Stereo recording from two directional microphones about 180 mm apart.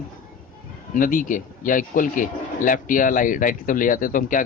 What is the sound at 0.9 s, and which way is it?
Speech, 50° left (ahead or behind).